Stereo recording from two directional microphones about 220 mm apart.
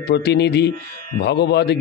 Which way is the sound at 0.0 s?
50° left (ahead or behind).